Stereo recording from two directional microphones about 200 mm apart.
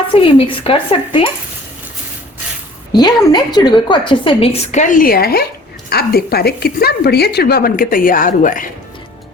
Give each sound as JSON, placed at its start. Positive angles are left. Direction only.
{"t": 0.1, "sound": "a woman's voice", "side_deg": 25}
{"t": 2.9, "sound": "a woman's voice", "side_deg": 20}